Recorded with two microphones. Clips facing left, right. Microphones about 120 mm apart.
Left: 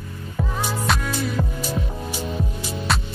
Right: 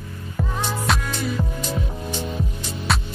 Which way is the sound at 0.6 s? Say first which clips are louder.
Even; 5° left (ahead or behind).